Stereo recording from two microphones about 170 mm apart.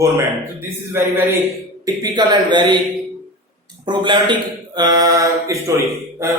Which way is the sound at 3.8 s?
25° right (ahead or behind).